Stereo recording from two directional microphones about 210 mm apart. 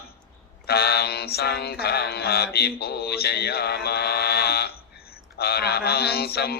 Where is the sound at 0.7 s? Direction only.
50° left (ahead or behind).